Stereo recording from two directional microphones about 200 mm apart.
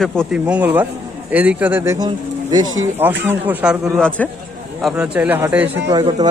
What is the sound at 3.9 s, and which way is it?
Speech, 5° left (ahead or behind).